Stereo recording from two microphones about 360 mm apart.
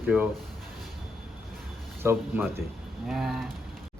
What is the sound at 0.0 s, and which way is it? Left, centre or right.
Speech, centre.